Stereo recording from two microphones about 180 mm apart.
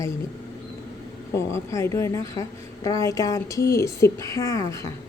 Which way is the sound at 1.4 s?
15° left (ahead or behind).